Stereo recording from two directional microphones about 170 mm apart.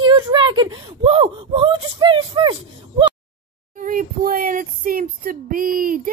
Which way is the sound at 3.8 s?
55° right (ahead or behind).